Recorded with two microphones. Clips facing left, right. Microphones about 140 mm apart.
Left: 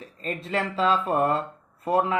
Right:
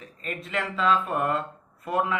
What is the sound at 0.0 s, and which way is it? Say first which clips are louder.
Speech: left 3 dB; 35° left (ahead or behind).